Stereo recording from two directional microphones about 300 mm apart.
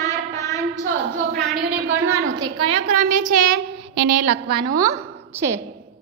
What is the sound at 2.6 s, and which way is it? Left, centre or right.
A woman's voice, right.